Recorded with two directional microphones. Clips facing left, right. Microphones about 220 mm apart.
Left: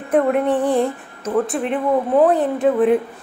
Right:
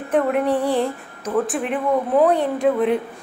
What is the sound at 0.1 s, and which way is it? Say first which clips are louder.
Speech: left 2 dB; 5° left (ahead or behind).